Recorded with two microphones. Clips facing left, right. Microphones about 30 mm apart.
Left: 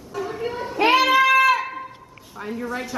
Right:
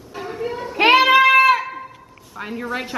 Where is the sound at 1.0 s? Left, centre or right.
Right.